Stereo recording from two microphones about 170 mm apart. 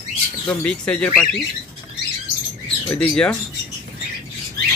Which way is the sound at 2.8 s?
5° left (ahead or behind).